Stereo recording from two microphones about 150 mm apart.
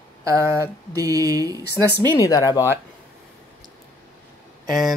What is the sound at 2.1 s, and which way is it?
Speech, 25° left (ahead or behind).